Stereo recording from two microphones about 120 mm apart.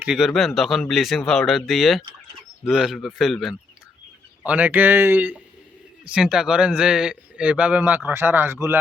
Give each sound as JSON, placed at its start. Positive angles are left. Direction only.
{"t": 0.0, "sound": "speech", "side_deg": -5}
{"t": 4.4, "sound": "speech", "side_deg": -15}